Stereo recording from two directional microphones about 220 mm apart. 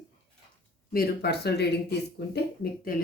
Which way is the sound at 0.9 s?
45° left (ahead or behind).